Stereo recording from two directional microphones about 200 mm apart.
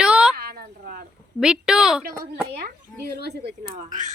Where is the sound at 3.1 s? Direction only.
55° right (ahead or behind).